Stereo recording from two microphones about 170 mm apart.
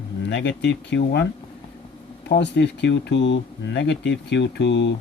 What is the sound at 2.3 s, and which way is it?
Speech, 90° left.